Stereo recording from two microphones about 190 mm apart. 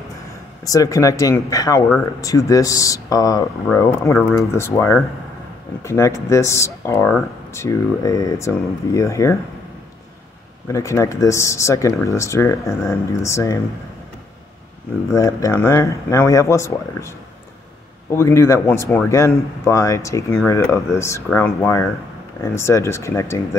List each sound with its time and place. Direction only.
0.7 s speech: 15° left (ahead or behind)
10.7 s speech: 15° left (ahead or behind)
15.1 s speech: 15° left (ahead or behind)
18.1 s speech: 15° left (ahead or behind)